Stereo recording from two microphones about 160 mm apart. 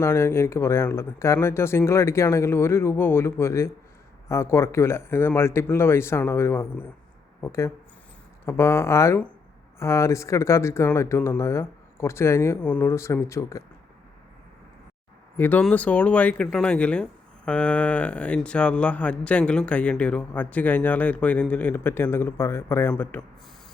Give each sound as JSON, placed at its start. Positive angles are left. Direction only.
{"t": 0.0, "sound": "speech", "side_deg": 15}
{"t": 15.4, "sound": "speech", "side_deg": 10}